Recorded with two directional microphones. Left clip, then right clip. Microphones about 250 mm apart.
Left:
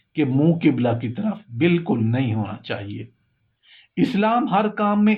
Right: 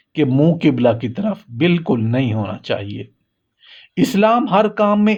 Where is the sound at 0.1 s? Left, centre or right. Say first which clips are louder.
Right 4 dB; right.